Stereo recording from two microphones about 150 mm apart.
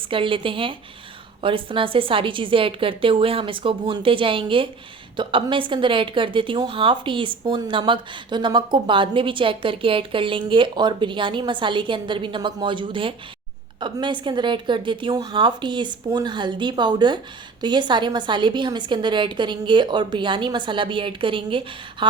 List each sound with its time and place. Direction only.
0.1 s a woman's voice: 35° right (ahead or behind)